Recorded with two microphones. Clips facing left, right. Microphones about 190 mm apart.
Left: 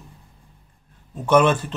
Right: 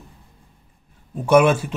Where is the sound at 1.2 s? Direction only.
10° right (ahead or behind).